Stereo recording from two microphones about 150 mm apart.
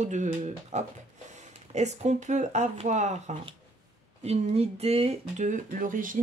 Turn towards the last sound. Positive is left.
turn(degrees=-65)  # may be behind; listen again after turning